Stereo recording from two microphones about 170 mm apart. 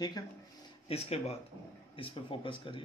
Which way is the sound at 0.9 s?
35° left (ahead or behind).